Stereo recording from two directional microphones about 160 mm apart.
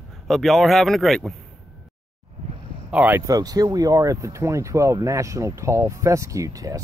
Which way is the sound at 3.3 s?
20° right (ahead or behind).